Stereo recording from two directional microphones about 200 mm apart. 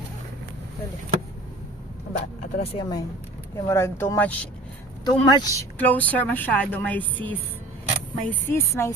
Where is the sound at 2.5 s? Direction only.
30° left (ahead or behind).